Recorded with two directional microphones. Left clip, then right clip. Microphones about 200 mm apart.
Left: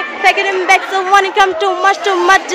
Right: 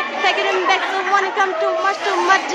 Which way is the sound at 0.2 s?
25° left (ahead or behind).